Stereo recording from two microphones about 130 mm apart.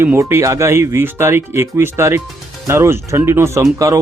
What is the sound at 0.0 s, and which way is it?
Speech, 20° right (ahead or behind).